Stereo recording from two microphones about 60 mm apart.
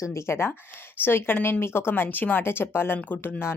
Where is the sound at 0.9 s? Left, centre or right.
Left.